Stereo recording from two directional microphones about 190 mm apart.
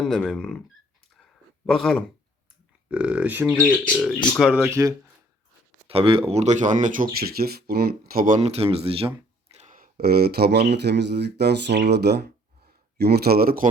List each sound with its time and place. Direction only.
0.0 s speech: centre (ahead or behind)
1.6 s speech: centre (ahead or behind)
3.6 s speech: 5° left (ahead or behind)
4.4 s speech: 5° right (ahead or behind)
4.7 s speech: 15° right (ahead or behind)
5.9 s speech: 30° right (ahead or behind); by 13.7 s 50° right (ahead or behind)